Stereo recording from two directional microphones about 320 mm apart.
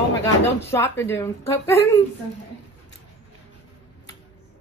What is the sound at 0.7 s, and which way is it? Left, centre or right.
Speech, centre.